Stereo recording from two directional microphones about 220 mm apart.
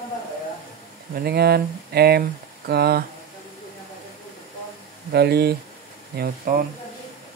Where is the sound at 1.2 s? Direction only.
45° right (ahead or behind).